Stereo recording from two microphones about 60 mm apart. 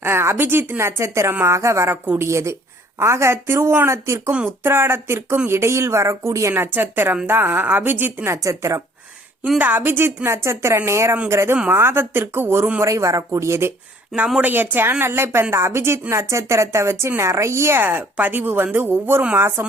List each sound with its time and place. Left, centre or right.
0.0 s a sound: right
0.8 s a woman's voice: right
6.5 s a woman's voice: right
8.3 s speech: right
9.6 s a woman's voice: right
10.2 s a woman's voice: right
12.8 s speech: right
14.4 s a woman's voice: right